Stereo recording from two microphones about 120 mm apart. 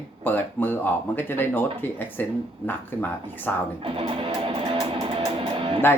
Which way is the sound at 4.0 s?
50° right (ahead or behind).